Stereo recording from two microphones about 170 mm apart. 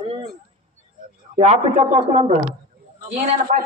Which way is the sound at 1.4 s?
40° right (ahead or behind).